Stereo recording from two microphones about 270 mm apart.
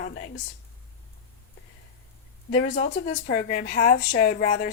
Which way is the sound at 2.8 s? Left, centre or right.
Left.